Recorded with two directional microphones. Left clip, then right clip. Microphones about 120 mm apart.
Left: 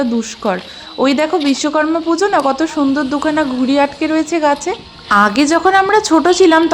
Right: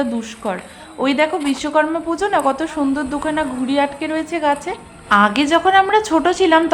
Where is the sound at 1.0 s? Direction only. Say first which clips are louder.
Left 3 dB; 40° left (ahead or behind).